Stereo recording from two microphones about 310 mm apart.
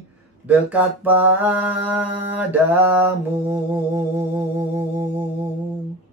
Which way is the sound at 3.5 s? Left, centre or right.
Centre.